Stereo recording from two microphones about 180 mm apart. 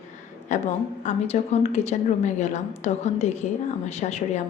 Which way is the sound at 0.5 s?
40° left (ahead or behind).